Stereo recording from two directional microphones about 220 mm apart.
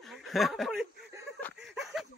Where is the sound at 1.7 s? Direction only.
Centre (ahead or behind).